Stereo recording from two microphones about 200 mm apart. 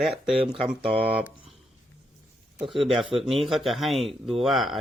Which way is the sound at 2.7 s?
Centre (ahead or behind).